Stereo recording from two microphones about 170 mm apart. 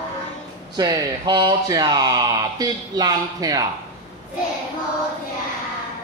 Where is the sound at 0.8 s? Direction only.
25° right (ahead or behind).